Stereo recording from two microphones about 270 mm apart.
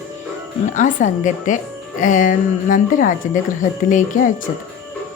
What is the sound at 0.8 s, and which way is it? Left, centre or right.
Speech, left.